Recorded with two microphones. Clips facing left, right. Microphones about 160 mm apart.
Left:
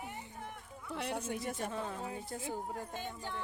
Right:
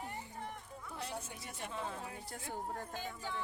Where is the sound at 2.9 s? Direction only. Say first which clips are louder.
Left 1 dB; centre (ahead or behind).